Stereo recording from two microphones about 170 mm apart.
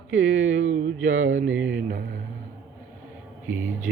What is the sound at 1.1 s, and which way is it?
Mantra, 50° right (ahead or behind).